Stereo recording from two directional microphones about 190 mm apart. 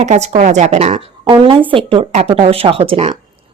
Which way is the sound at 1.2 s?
25° right (ahead or behind).